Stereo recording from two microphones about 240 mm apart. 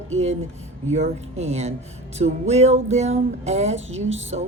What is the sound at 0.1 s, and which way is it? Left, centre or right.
Music, right.